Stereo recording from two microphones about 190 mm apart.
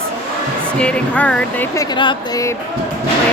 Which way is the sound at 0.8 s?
5° left (ahead or behind).